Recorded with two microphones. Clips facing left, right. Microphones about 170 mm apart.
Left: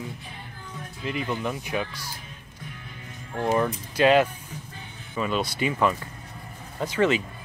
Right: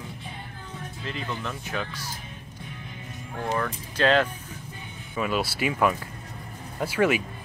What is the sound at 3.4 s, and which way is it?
Speech, 20° left (ahead or behind).